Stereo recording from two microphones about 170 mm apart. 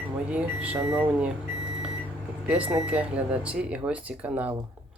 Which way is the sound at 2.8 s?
5° right (ahead or behind).